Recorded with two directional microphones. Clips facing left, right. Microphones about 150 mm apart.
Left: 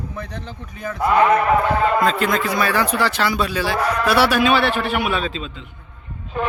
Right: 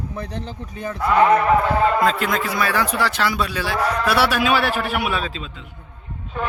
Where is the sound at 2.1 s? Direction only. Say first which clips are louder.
Left 2 dB; 5° right (ahead or behind).